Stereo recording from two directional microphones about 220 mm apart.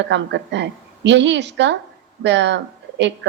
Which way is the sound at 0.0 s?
50° right (ahead or behind).